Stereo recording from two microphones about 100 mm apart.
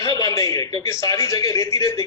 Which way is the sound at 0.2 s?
35° left (ahead or behind).